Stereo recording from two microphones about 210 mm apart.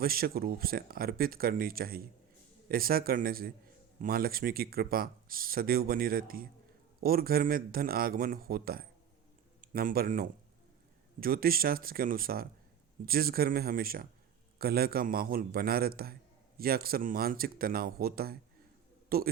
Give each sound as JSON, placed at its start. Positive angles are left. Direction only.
{"t": 0.0, "sound": "a man's voice", "side_deg": -45}